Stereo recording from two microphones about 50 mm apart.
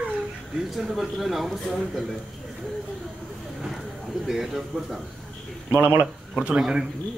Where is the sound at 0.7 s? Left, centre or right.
Centre.